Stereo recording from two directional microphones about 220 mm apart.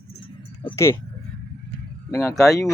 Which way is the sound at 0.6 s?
20° left (ahead or behind).